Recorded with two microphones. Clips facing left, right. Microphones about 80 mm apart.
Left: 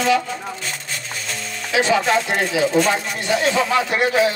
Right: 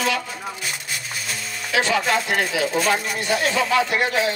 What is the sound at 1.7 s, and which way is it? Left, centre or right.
Speech, left.